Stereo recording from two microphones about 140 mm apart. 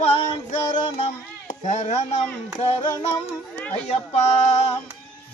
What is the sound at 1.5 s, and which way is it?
Speech, 55° left (ahead or behind).